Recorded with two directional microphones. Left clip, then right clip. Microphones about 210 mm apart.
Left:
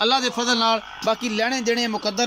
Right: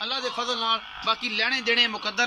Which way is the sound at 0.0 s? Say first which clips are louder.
Left 8 dB; 50° left (ahead or behind).